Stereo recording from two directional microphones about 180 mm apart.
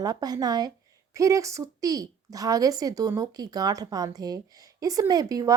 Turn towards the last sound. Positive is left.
turn(degrees=-20)  # may be behind; listen again after turning